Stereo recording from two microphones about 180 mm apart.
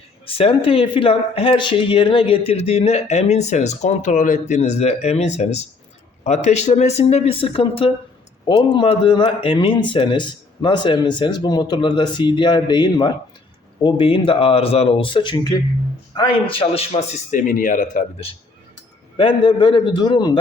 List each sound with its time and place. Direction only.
0.3 s speech: 30° left (ahead or behind)
17.3 s speech: 50° left (ahead or behind)
19.1 s speech: 25° left (ahead or behind)